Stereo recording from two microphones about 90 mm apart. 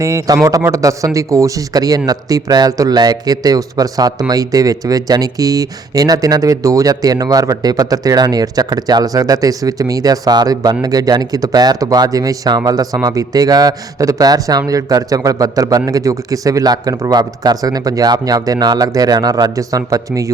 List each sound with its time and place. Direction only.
0.0 s a man's voice: 35° right (ahead or behind)